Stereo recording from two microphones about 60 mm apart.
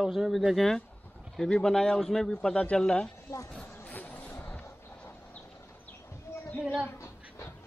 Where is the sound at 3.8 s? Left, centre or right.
Left.